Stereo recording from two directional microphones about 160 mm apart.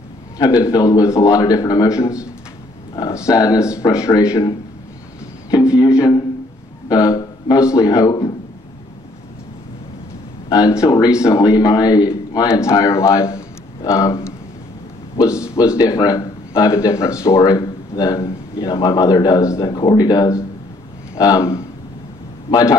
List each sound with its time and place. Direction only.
0.4 s speech: 25° left (ahead or behind)
3.3 s speech: 20° left (ahead or behind)
5.9 s a sound: 25° left (ahead or behind)
10.5 s speech: 20° left (ahead or behind)
15.5 s speech: 20° left (ahead or behind)